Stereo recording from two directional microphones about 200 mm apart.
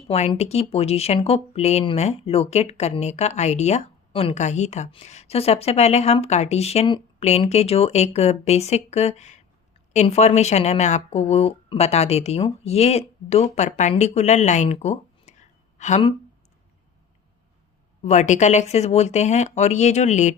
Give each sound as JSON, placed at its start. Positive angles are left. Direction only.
{"t": 0.1, "sound": "speech", "side_deg": 30}
{"t": 18.0, "sound": "speech", "side_deg": 35}